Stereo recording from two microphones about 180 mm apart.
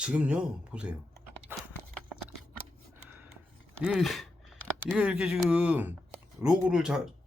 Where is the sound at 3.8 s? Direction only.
Centre (ahead or behind).